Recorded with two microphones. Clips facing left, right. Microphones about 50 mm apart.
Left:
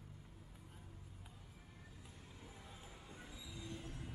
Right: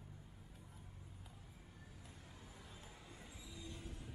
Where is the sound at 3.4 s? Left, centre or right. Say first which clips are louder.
Left 3 dB; left.